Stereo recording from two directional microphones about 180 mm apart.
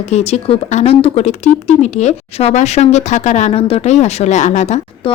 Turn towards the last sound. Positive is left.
turn(degrees=40)  # may be behind; listen again after turning